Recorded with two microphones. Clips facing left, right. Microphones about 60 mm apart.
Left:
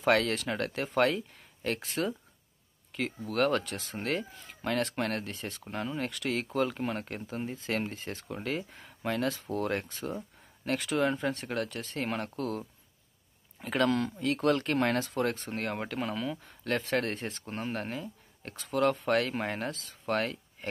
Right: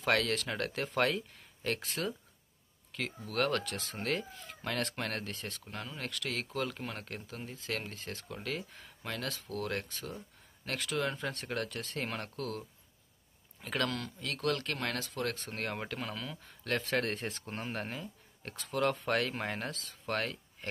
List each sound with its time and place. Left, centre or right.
0.0 s speech: centre
15.4 s speech: centre